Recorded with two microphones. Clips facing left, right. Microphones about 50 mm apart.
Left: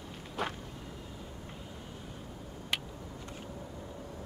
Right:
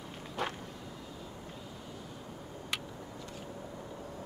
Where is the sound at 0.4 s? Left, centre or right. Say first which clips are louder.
Even; centre.